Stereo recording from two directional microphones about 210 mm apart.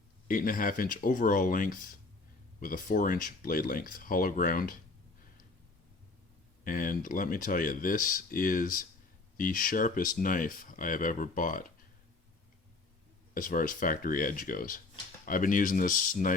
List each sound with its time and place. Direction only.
0.3 s speech: 40° left (ahead or behind)
6.7 s speech: 40° left (ahead or behind)
13.3 s speech: 40° left (ahead or behind)